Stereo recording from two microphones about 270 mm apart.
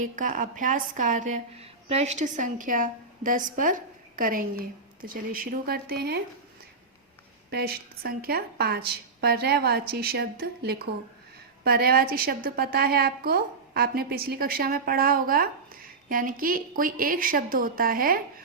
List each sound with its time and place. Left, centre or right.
0.0 s a woman's voice: right
7.5 s a woman's voice: right